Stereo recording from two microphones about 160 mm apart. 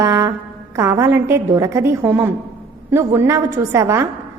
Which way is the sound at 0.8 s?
15° right (ahead or behind).